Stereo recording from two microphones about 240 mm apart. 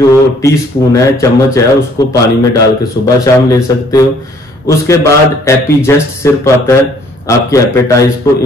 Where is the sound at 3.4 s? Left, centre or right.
Centre.